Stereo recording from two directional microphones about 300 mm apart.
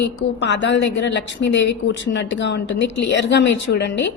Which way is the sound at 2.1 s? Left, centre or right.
Left.